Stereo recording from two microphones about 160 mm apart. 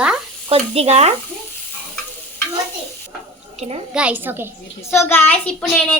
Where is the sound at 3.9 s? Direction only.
10° right (ahead or behind).